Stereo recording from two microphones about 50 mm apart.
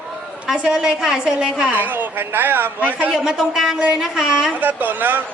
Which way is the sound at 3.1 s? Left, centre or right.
Centre.